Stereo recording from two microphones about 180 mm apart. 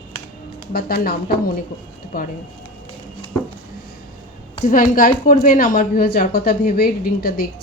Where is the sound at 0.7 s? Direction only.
55° left (ahead or behind).